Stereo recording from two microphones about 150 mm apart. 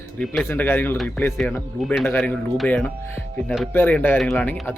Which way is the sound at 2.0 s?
10° left (ahead or behind).